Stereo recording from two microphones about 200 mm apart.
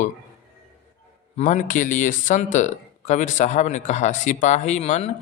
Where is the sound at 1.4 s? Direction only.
40° left (ahead or behind).